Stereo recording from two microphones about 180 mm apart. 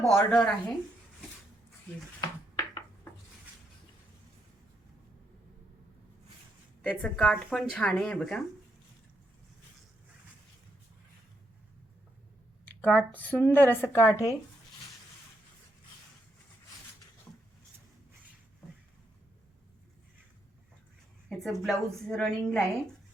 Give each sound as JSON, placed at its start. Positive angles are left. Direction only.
{"t": 0.1, "sound": "speech", "side_deg": 5}
{"t": 2.6, "sound": "a sound", "side_deg": 15}
{"t": 6.8, "sound": "speech", "side_deg": 5}
{"t": 12.8, "sound": "speech", "side_deg": 10}
{"t": 21.2, "sound": "speech", "side_deg": 0}